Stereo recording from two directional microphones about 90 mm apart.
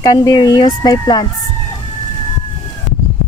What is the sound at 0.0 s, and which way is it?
Speech, 40° left (ahead or behind).